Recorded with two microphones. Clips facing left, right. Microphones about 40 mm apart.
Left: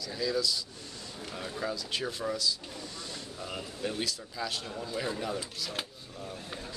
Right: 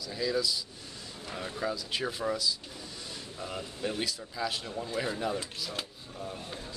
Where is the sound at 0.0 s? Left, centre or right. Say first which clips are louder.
Even; centre.